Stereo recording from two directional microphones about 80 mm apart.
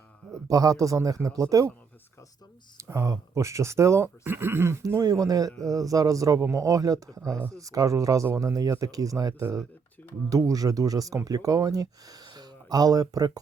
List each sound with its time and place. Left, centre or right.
0.4 s a man's voice: right
2.7 s speech: right
5.0 s a man's voice: right